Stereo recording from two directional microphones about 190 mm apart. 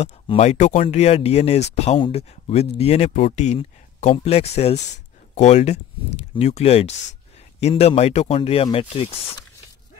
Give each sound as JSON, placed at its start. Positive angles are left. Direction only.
{"t": 0.0, "sound": "speech", "side_deg": 35}